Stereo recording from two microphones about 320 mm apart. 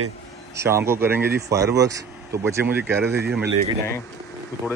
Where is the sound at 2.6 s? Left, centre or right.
Right.